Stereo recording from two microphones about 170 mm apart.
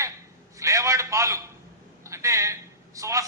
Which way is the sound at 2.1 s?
15° right (ahead or behind).